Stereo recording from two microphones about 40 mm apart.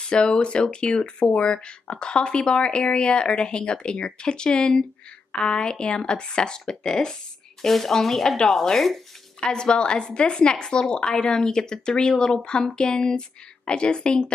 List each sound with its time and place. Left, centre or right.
0.0 s speech: left
7.6 s speech: centre
9.4 s speech: left